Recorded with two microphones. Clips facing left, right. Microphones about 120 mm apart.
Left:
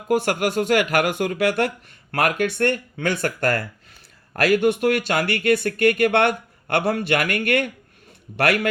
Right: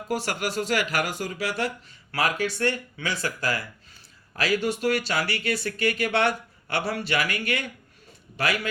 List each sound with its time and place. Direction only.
0.1 s speech: 55° left (ahead or behind)